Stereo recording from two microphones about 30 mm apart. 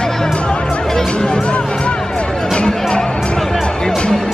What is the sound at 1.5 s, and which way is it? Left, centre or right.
Music, left.